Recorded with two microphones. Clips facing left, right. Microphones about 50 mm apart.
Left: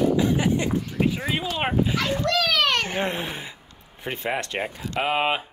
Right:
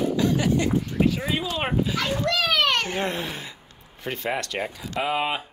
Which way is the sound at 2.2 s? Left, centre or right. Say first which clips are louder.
Even; centre.